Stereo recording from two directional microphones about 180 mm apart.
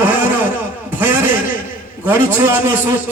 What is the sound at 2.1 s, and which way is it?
Speech, 10° right (ahead or behind).